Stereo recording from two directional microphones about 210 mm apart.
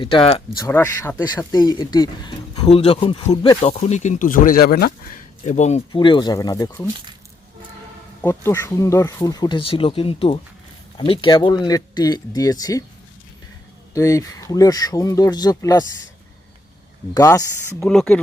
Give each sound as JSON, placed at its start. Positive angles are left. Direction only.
{"t": 0.0, "sound": "speech", "side_deg": 25}
{"t": 8.2, "sound": "speech", "side_deg": 10}
{"t": 13.9, "sound": "speech", "side_deg": 15}
{"t": 17.2, "sound": "speech", "side_deg": 15}
{"t": 17.7, "sound": "speech", "side_deg": 5}